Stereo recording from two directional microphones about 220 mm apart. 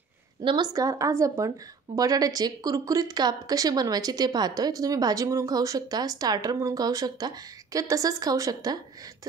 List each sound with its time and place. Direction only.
0.4 s speech: 20° right (ahead or behind)